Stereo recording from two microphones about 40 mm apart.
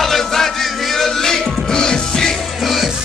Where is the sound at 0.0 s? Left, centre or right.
Centre.